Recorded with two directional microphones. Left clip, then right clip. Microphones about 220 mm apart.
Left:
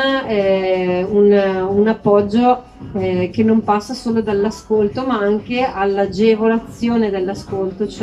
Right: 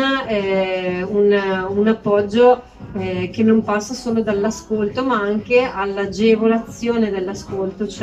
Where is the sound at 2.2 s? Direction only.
20° left (ahead or behind).